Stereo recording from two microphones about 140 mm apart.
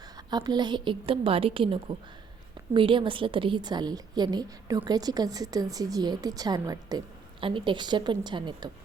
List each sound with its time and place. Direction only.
0.3 s a woman's voice: 30° right (ahead or behind)